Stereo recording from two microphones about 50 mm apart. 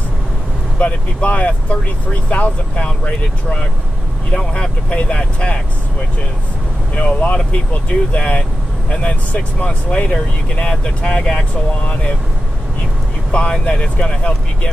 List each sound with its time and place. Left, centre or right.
0.7 s speech: left
7.0 s speech: left
13.3 s speech: left